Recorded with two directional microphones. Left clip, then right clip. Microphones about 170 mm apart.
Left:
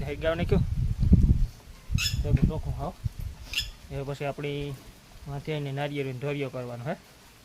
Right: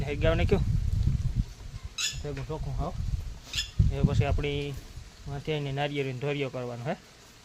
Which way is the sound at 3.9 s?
35° right (ahead or behind).